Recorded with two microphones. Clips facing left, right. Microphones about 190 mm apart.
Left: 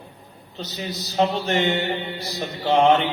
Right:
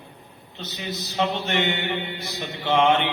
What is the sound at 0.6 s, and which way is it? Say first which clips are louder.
Speech: left 2 dB; 35° left (ahead or behind).